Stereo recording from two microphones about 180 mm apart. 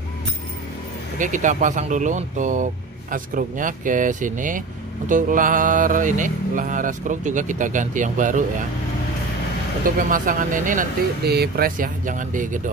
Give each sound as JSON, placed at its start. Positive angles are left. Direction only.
{"t": 1.1, "sound": "speech", "side_deg": -45}
{"t": 9.8, "sound": "speech", "side_deg": -50}